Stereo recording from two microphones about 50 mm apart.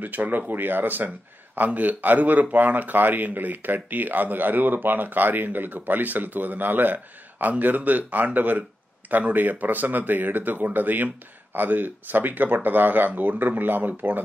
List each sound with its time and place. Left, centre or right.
0.0 s a man's voice: right